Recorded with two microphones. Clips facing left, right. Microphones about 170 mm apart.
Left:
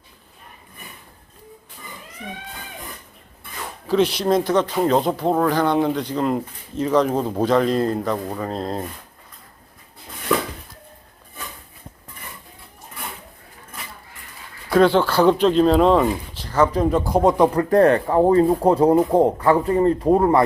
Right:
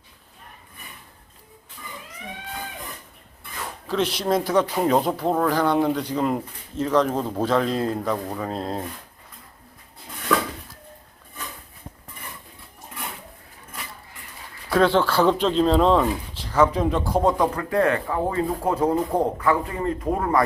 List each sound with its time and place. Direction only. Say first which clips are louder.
3.8 s speech: left 5 dB; centre (ahead or behind)
14.7 s speech: left 3 dB; centre (ahead or behind); by 17.5 s 20° left (ahead or behind)
17.6 s speech: left 7 dB; 40° left (ahead or behind)